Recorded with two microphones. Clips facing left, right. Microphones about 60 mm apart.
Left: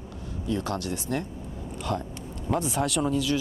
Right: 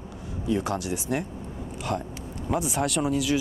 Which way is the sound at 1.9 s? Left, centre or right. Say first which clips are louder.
Even; centre.